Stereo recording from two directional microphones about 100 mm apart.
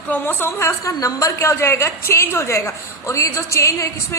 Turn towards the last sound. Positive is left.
turn(degrees=30)  # may be behind; listen again after turning